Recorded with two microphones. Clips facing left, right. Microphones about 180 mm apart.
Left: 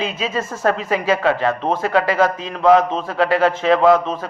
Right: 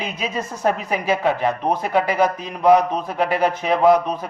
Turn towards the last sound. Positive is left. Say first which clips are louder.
# left 1 dB
turn(degrees=-15)  # may be behind; listen again after turning